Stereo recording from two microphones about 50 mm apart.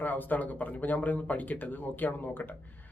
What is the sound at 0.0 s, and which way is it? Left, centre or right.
Speech, left.